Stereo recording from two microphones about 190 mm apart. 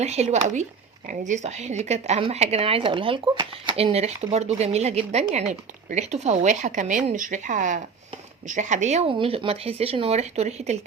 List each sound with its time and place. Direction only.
0.0 s speech: 35° right (ahead or behind)